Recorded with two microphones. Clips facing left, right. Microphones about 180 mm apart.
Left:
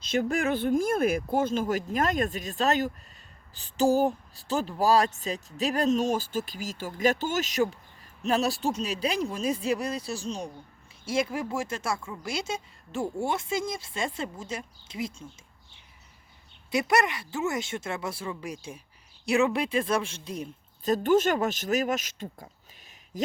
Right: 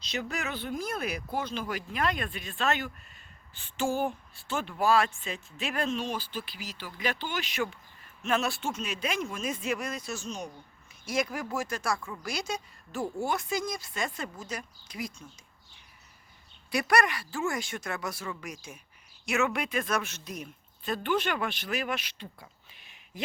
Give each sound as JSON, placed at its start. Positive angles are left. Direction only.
{"t": 0.0, "sound": "speech", "side_deg": 50}
{"t": 16.7, "sound": "a woman's voice", "side_deg": 20}